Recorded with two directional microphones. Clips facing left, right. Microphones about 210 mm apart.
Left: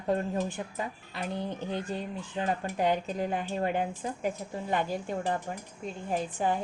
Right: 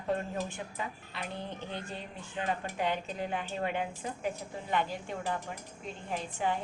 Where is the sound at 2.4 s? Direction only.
40° left (ahead or behind).